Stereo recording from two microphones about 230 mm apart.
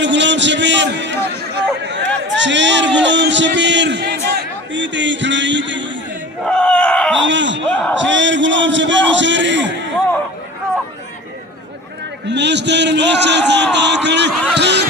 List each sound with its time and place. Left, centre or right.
0.0 s a man's voice: right
6.4 s a sound: centre
7.2 s a man's voice: right
12.2 s a man's voice: right